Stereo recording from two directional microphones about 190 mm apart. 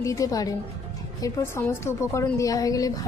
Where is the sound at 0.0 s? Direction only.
15° left (ahead or behind).